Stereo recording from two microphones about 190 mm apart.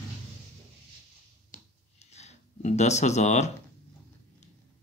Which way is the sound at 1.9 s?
35° left (ahead or behind).